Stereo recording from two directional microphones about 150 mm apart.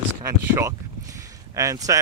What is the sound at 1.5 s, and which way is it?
Speech, 20° right (ahead or behind).